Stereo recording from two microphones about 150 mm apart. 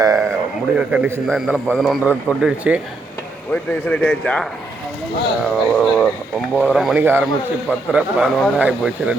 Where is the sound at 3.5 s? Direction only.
10° left (ahead or behind).